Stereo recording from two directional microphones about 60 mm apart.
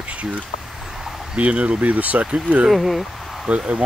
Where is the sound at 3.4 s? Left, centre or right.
Centre.